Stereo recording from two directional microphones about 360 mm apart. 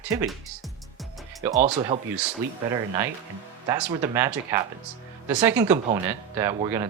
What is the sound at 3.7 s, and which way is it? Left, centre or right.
Speech, centre.